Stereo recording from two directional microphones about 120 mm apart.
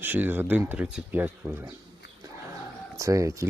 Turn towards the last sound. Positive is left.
turn(degrees=-25)  # may be behind; listen again after turning